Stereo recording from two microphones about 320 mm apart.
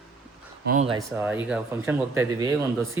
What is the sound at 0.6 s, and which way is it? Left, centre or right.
Speech, right.